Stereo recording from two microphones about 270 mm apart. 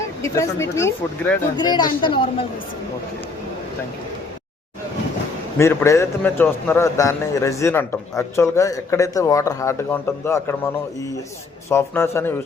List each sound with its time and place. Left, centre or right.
0.2 s a man's voice: centre
5.5 s a man's voice: centre
11.7 s a man's voice: centre